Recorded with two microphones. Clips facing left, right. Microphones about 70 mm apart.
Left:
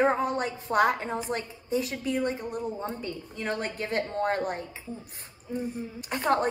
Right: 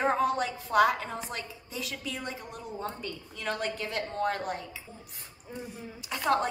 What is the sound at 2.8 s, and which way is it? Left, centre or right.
A woman's voice, left.